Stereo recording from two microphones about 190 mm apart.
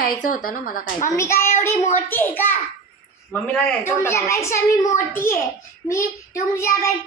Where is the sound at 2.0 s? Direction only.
10° left (ahead or behind).